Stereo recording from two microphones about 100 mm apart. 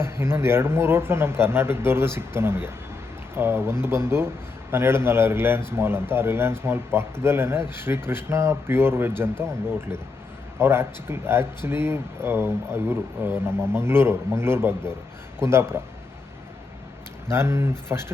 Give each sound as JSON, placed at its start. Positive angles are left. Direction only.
{"t": 0.0, "sound": "speech", "side_deg": -25}
{"t": 10.6, "sound": "speech", "side_deg": -25}
{"t": 17.2, "sound": "speech", "side_deg": -25}